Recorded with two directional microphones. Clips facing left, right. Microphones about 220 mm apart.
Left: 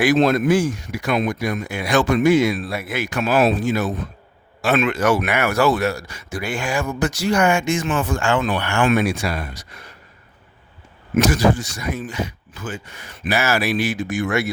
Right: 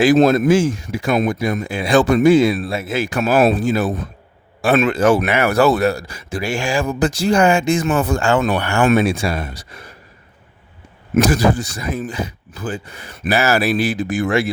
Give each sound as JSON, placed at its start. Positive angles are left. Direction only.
{"t": 0.3, "sound": "speech", "side_deg": -25}
{"t": 1.1, "sound": "speech", "side_deg": -40}
{"t": 1.4, "sound": "speech", "side_deg": -30}
{"t": 3.2, "sound": "speech", "side_deg": -50}
{"t": 3.6, "sound": "speech", "side_deg": -35}
{"t": 9.0, "sound": "speech", "side_deg": -30}
{"t": 11.1, "sound": "speech", "side_deg": -35}